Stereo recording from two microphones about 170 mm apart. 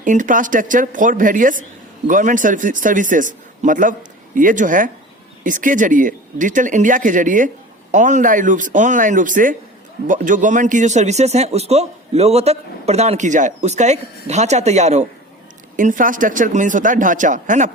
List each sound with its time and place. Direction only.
0.0 s a man's voice: 50° right (ahead or behind)